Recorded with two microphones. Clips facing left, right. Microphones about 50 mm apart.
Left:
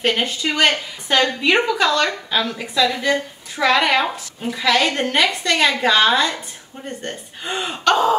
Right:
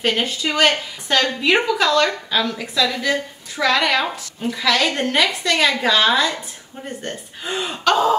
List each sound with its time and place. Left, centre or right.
0.0 s a woman's voice: centre